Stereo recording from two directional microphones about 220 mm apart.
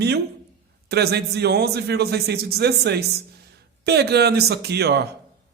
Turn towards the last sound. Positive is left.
turn(degrees=-50)  # may be behind; listen again after turning